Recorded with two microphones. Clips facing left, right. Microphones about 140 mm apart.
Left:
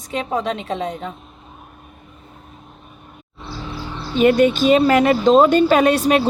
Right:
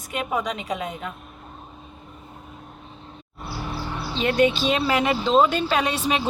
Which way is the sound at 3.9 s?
10° right (ahead or behind).